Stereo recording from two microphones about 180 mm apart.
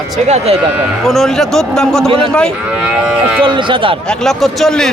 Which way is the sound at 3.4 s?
25° right (ahead or behind).